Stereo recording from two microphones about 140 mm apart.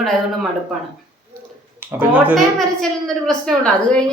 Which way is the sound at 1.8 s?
10° right (ahead or behind).